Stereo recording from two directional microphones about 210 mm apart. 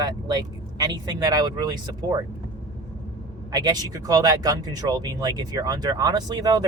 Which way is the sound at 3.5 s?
20° right (ahead or behind).